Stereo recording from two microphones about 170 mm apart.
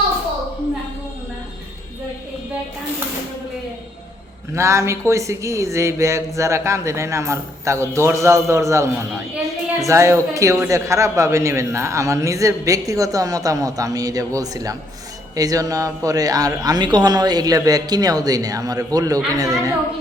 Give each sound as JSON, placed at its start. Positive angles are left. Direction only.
{"t": 4.5, "sound": "speech", "side_deg": -15}